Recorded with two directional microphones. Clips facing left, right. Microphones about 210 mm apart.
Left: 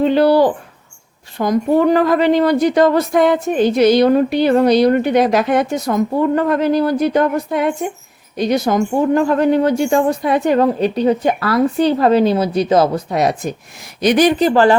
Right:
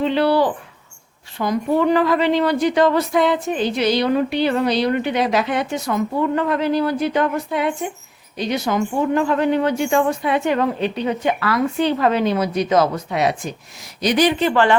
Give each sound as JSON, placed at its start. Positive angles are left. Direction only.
{"t": 0.0, "sound": "a woman's voice", "side_deg": 45}